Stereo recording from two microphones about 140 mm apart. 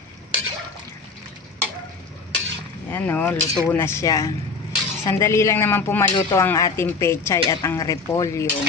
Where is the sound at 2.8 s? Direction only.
15° left (ahead or behind).